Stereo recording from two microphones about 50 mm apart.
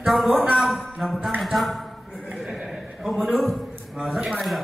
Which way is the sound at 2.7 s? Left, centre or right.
Centre.